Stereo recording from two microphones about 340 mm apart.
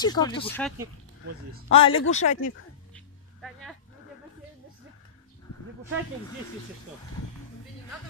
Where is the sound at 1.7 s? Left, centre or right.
Centre.